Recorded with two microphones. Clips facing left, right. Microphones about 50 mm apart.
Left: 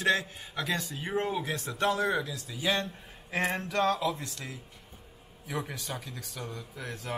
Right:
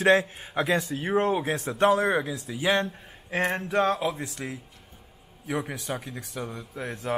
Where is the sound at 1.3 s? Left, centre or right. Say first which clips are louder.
Right 6 dB; right.